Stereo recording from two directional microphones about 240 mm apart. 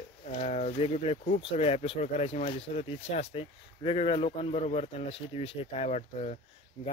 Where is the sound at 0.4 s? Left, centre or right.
Left.